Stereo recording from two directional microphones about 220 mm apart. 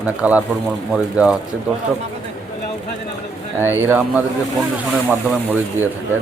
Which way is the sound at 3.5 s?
10° right (ahead or behind).